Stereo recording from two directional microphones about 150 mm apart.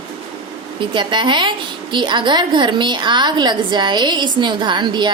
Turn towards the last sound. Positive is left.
turn(degrees=-30)  # may be behind; listen again after turning